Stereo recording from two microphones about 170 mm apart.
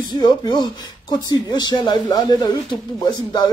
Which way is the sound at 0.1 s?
25° left (ahead or behind).